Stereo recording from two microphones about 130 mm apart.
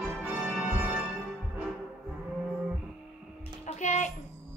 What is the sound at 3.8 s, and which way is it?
Music, 65° left (ahead or behind).